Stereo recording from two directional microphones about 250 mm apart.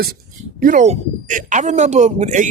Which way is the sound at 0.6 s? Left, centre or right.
Right.